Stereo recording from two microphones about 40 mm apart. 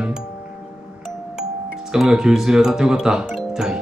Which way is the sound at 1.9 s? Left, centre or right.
Centre.